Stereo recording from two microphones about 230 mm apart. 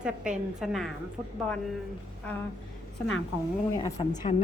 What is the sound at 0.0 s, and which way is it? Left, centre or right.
Speech, centre.